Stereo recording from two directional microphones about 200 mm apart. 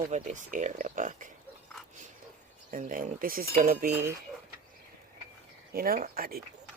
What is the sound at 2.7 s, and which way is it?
Cutlery, 45° right (ahead or behind).